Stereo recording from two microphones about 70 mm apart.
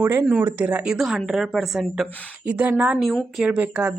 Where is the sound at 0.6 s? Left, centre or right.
Centre.